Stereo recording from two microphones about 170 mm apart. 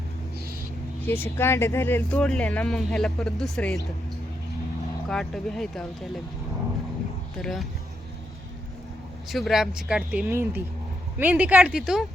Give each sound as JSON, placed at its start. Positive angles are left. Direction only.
{"t": 1.0, "sound": "speech", "side_deg": 15}
{"t": 5.0, "sound": "speech", "side_deg": 0}
{"t": 7.4, "sound": "speech", "side_deg": 0}
{"t": 9.3, "sound": "speech", "side_deg": 0}